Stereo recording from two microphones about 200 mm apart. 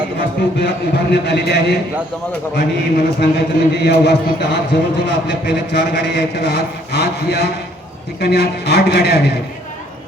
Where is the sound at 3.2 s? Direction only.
55° left (ahead or behind).